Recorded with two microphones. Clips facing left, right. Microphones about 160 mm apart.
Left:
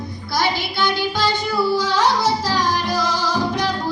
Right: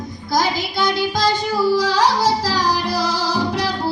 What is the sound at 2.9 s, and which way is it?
Music, 35° right (ahead or behind).